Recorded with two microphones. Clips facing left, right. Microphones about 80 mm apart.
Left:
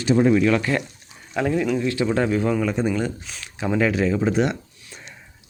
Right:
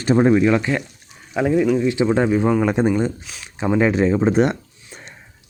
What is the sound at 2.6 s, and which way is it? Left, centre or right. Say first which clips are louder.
Speech: right 5 dB; right.